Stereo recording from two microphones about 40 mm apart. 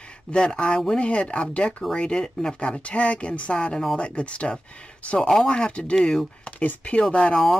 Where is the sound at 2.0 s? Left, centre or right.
Left.